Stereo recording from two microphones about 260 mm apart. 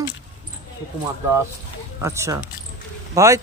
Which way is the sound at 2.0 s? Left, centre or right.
Centre.